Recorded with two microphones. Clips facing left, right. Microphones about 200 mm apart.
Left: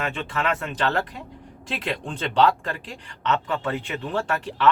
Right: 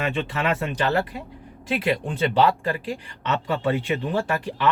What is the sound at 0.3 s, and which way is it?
A woman's voice, 15° right (ahead or behind).